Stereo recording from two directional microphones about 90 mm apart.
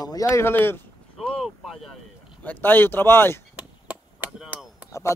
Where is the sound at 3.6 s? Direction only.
15° right (ahead or behind).